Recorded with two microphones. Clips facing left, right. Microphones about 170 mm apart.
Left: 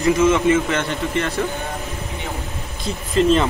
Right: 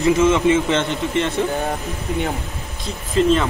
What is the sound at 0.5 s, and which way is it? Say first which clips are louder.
Speech: right 1 dB; 20° right (ahead or behind).